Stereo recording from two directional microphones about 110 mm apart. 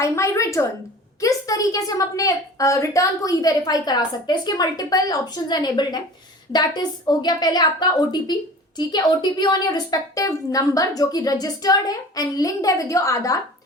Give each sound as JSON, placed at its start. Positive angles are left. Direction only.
{"t": 0.0, "sound": "a woman's voice", "side_deg": 25}